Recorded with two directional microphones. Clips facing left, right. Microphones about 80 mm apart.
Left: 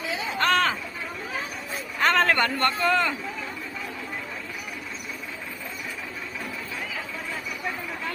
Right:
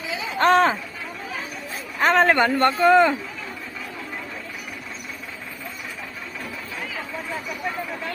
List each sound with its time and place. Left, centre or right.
0.3 s speech: right
2.0 s a man's voice: centre